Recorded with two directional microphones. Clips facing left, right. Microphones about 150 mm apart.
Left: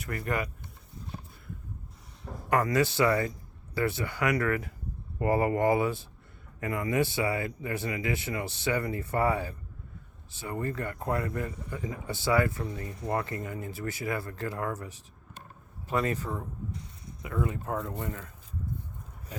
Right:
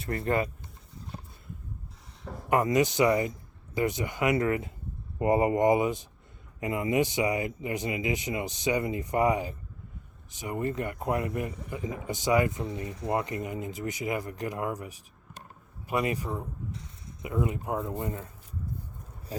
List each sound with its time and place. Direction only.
0.0 s a man's voice: 25° right (ahead or behind)
2.5 s a man's voice: 20° right (ahead or behind)
19.3 s a sound: 35° right (ahead or behind)